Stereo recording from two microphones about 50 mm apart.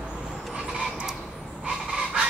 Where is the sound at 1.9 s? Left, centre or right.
Centre.